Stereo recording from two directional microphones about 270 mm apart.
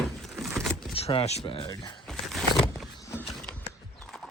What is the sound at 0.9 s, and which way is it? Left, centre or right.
Speech, left.